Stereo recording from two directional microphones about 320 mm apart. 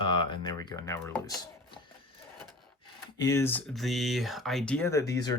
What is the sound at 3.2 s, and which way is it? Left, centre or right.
Speech, centre.